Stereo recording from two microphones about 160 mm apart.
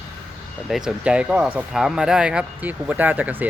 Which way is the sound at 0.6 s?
5° right (ahead or behind).